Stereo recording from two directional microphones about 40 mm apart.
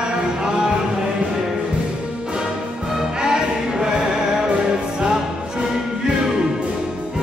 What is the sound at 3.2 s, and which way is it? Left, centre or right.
Music, centre.